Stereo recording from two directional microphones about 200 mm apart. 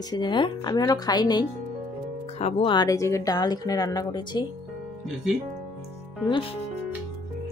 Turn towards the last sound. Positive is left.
turn(degrees=25)  # may be behind; listen again after turning